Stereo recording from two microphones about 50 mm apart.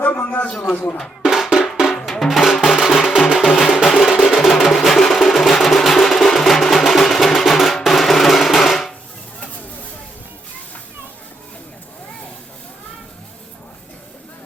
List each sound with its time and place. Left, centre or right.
0.0 s a sound: left
0.4 s a man's voice: centre
1.2 s drum: centre
2.0 s music: centre
7.9 s drum: centre